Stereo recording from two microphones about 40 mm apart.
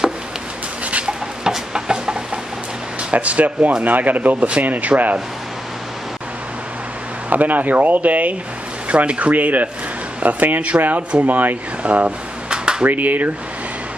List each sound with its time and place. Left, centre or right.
1.0 s a sound: centre
3.1 s speech: right
7.2 s speech: right
8.8 s speech: right
9.3 s speech: right
12.4 s a sound: right
12.8 s speech: right